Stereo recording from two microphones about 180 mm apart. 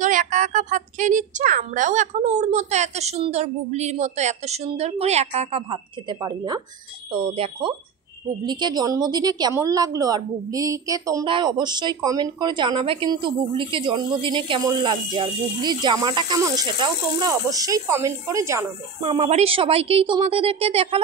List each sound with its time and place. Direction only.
0.0 s a woman's voice: 45° right (ahead or behind); by 18.7 s 15° right (ahead or behind)
19.0 s a woman's voice: 35° right (ahead or behind)